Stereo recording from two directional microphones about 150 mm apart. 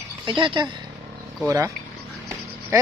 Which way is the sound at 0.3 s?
30° right (ahead or behind).